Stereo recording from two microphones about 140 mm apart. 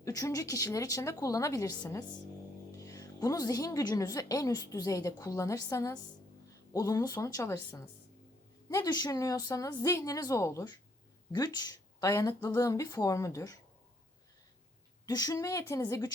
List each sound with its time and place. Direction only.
0.0 s a woman's voice: 20° left (ahead or behind)
15.0 s a woman's voice: 25° left (ahead or behind)